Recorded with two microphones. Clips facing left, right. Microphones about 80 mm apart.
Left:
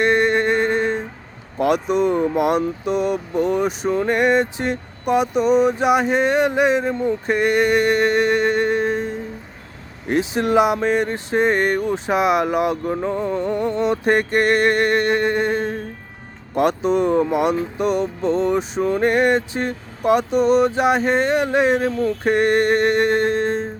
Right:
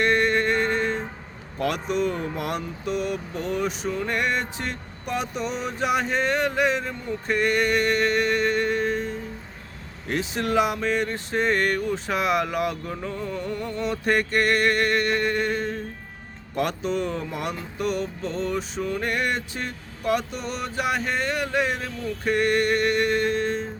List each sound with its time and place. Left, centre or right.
0.0 s music: centre
1.5 s speech: centre
18.8 s speech: left